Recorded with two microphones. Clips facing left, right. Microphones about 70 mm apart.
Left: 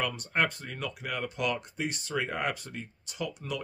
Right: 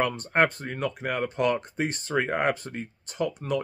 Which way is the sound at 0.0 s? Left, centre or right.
Right.